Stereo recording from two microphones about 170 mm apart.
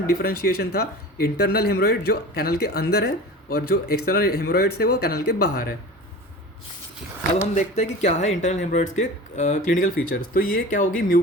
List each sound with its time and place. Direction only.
0.1 s speech: 65° left (ahead or behind)
8.0 s speech: 45° left (ahead or behind)